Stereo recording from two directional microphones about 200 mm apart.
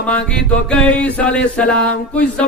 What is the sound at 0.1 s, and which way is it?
Chant, 5° left (ahead or behind).